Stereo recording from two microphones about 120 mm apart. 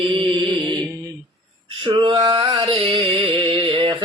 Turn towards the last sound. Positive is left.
turn(degrees=-45)  # may be behind; listen again after turning